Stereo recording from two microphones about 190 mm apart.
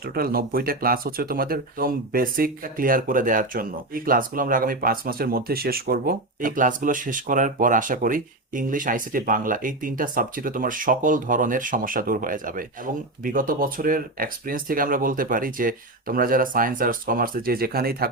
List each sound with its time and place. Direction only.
0.0 s speech: 50° right (ahead or behind)